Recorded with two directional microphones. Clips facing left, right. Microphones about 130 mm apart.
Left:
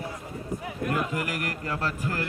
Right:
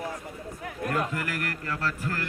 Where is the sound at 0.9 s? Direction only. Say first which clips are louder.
Even; 15° left (ahead or behind).